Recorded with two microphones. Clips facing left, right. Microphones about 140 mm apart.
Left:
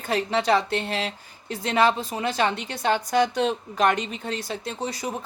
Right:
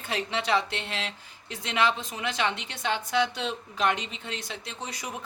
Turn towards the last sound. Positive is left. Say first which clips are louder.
# left 8 dB
turn(degrees=35)  # may be behind; listen again after turning